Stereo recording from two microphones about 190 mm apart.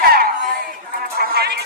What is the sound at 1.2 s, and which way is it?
Music, 55° right (ahead or behind).